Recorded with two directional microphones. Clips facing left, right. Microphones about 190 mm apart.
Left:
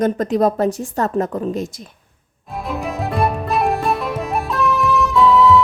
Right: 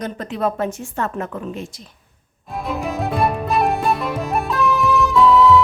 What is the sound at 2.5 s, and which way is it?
Music, centre (ahead or behind).